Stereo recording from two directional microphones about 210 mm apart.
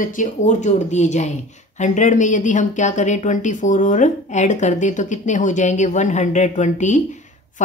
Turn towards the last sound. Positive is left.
turn(degrees=35)  # may be behind; listen again after turning